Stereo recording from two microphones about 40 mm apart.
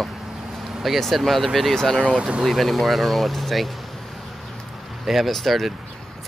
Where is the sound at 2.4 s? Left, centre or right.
Centre.